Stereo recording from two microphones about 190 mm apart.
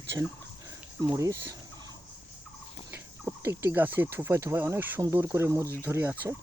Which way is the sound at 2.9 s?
10° right (ahead or behind).